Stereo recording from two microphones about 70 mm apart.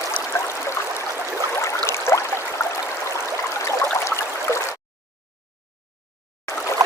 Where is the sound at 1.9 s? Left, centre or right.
Left.